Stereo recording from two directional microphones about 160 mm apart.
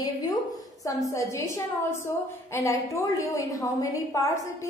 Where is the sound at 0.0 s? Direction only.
25° left (ahead or behind).